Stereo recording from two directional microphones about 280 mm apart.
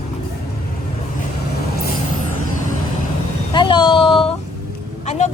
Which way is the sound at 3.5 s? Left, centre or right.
Centre.